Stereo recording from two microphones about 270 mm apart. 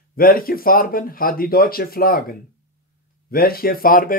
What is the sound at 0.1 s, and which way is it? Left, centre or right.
Speech, left.